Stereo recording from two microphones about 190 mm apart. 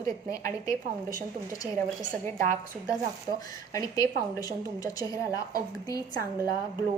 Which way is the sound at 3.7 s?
20° left (ahead or behind).